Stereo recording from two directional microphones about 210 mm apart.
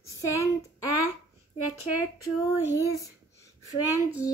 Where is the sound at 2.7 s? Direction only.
15° left (ahead or behind).